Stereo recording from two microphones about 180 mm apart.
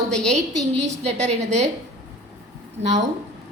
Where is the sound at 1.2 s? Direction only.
40° right (ahead or behind).